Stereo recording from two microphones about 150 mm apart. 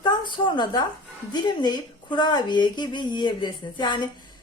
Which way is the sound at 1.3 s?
30° left (ahead or behind).